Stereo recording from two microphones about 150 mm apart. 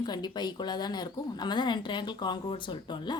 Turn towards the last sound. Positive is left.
turn(degrees=30)  # may be behind; listen again after turning